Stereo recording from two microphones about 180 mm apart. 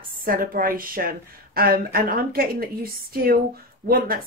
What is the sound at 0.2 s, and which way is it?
Speech, 50° right (ahead or behind).